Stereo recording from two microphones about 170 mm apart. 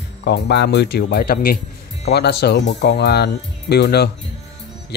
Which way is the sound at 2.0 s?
75° left (ahead or behind).